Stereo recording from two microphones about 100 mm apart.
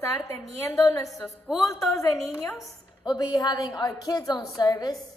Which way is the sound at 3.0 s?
45° left (ahead or behind).